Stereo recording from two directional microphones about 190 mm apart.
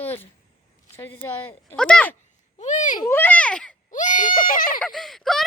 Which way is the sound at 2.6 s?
40° left (ahead or behind).